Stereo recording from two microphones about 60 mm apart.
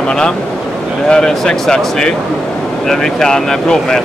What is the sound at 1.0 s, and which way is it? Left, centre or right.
Speech, centre.